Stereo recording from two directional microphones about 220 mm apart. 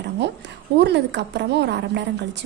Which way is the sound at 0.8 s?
50° right (ahead or behind).